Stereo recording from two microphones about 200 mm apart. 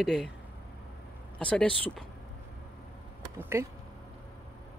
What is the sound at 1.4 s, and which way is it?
Speech, 5° left (ahead or behind).